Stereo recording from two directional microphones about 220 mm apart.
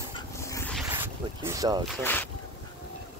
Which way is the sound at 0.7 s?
10° right (ahead or behind).